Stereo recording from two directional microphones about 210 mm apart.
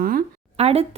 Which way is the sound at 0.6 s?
30° right (ahead or behind).